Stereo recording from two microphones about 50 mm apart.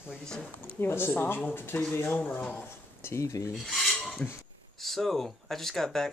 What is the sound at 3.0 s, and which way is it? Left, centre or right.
Speech, left.